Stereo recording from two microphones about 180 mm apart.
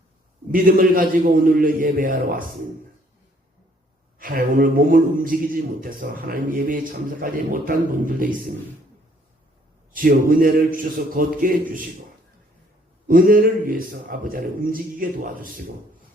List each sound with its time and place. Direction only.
0.5 s a man's voice: 50° right (ahead or behind)
4.2 s a man's voice: 50° right (ahead or behind)
9.9 s a man's voice: 50° right (ahead or behind)
13.1 s a man's voice: 50° right (ahead or behind)